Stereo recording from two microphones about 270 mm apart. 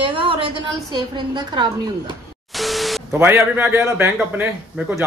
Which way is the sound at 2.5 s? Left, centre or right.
Centre.